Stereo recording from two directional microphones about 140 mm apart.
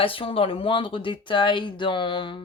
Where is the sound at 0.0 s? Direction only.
40° left (ahead or behind).